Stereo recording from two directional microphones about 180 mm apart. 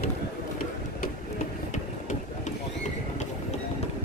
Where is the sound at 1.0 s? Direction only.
45° left (ahead or behind).